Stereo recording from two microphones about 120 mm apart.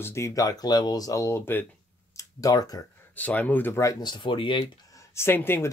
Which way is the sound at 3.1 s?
15° left (ahead or behind).